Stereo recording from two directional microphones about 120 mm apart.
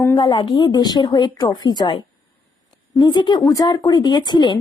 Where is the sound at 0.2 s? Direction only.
40° left (ahead or behind).